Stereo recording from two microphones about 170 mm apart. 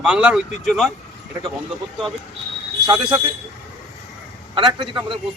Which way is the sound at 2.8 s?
25° right (ahead or behind).